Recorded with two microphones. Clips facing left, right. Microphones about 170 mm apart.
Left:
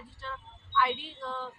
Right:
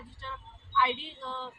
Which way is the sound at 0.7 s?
15° right (ahead or behind).